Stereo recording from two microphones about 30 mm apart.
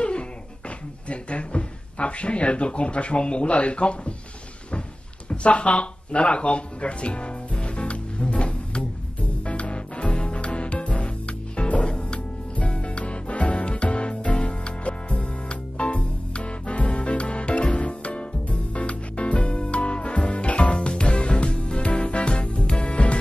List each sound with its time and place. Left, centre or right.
0.0 s beatboxing: left
1.0 s speech: left
5.3 s a sound: left
9.4 s music: left